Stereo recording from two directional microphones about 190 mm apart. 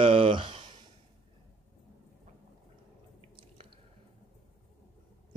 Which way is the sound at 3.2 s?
30° right (ahead or behind).